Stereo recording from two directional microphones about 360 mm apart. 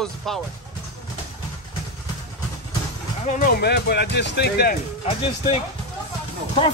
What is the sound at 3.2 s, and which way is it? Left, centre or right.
Speech, left.